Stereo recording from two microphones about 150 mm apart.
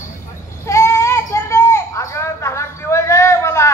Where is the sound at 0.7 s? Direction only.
20° left (ahead or behind).